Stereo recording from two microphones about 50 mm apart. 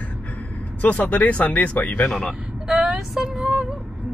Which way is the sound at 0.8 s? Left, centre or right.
Left.